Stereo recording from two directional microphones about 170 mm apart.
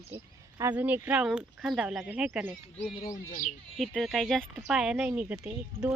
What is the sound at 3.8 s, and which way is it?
Speech, centre (ahead or behind).